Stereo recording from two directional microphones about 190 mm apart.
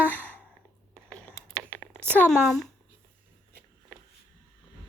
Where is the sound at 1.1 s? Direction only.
5° left (ahead or behind).